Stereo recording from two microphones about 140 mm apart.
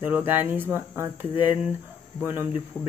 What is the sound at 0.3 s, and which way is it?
Speech, 15° right (ahead or behind).